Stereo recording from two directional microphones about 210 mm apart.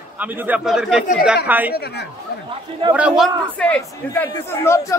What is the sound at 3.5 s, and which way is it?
Speech, 5° left (ahead or behind).